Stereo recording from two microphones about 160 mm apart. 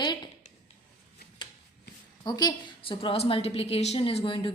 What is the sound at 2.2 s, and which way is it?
A woman's voice, 25° left (ahead or behind).